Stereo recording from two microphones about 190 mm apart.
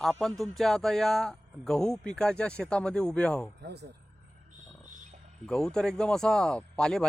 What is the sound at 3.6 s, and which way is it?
Speech, 60° right (ahead or behind).